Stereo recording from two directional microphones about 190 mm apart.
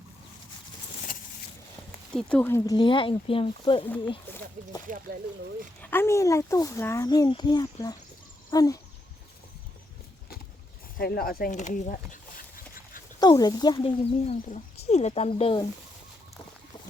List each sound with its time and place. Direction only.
2.1 s speech: 10° left (ahead or behind)
2.7 s speech: 25° left (ahead or behind)
3.8 s speech: 10° left (ahead or behind)
4.9 s speech: 45° right (ahead or behind)
5.8 s speech: 10° left (ahead or behind)
10.9 s a sound: 55° left (ahead or behind)
13.1 s speech: 20° left (ahead or behind)